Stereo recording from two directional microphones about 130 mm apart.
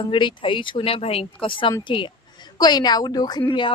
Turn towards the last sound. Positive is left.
turn(degrees=40)  # may be behind; listen again after turning